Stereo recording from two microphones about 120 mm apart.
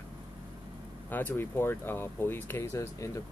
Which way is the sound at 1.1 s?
15° left (ahead or behind).